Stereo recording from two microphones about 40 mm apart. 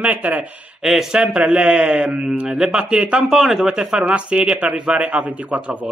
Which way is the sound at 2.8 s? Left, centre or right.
Right.